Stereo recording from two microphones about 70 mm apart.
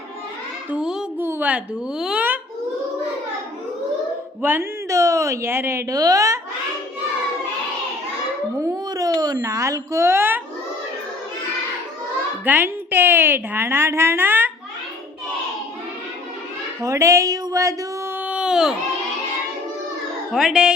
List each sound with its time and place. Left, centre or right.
0.8 s a sound: centre
1.2 s a sound: right
1.5 s a child's voice: centre
4.4 s a woman's voice: right
4.9 s speech: right
5.9 s speech: right
8.7 s speech: right
9.4 s speech: right
12.5 s a woman's voice: right
16.8 s speech: right
18.2 s baby cry: centre
20.3 s speech: centre